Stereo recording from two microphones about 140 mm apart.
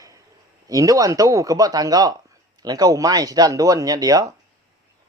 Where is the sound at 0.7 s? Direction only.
25° right (ahead or behind).